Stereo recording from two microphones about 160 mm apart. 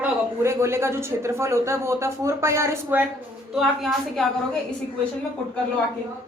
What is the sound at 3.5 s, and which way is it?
Speech, centre (ahead or behind).